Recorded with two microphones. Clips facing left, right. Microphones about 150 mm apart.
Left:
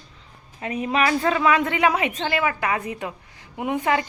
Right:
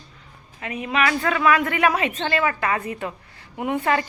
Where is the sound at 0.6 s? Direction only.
35° left (ahead or behind).